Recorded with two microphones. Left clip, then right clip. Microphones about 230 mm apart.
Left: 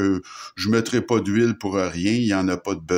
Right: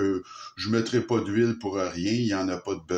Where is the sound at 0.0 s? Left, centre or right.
Left.